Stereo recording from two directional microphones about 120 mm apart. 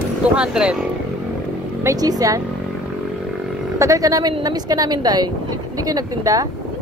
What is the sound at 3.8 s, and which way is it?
A woman's voice, 25° right (ahead or behind).